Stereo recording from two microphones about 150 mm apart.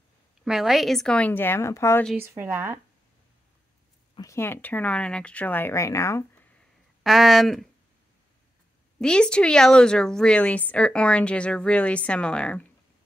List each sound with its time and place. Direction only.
0.5 s a woman's voice: centre (ahead or behind); by 2.0 s 15° left (ahead or behind)
2.1 s speech: 15° right (ahead or behind)
4.3 s a woman's voice: 15° left (ahead or behind)
7.0 s speech: centre (ahead or behind)
9.0 s a woman's voice: 5° left (ahead or behind)